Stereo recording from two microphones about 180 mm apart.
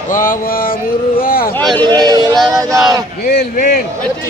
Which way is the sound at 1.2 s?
55° left (ahead or behind).